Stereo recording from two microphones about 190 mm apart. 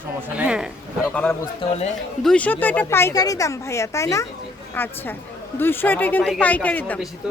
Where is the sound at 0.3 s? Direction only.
5° right (ahead or behind).